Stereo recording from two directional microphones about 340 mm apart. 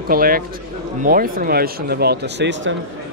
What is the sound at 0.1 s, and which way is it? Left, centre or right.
Speech, right.